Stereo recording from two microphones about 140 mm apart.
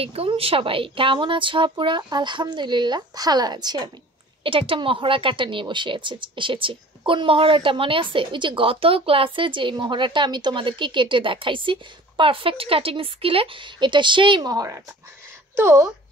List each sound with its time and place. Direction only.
0.0 s speech: 45° right (ahead or behind); by 15.9 s 20° right (ahead or behind)